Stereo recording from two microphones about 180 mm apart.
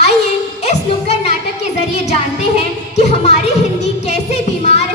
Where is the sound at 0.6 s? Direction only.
35° left (ahead or behind).